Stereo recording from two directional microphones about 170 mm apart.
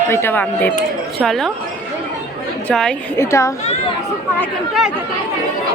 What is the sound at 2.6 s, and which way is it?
Speech, 5° left (ahead or behind).